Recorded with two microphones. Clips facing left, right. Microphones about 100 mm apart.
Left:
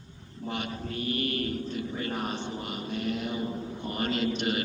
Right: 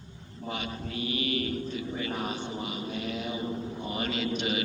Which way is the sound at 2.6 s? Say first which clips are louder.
Left 2 dB; 50° left (ahead or behind).